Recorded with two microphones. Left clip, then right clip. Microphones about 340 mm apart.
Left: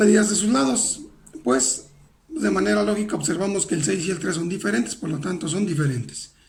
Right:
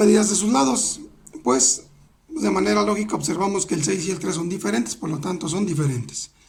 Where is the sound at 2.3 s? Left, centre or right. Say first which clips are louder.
Right 1 dB; centre.